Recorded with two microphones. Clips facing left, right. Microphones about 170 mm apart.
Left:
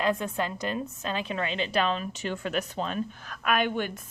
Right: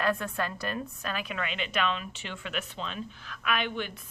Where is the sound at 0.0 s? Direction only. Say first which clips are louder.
Left 2 dB; 20° left (ahead or behind).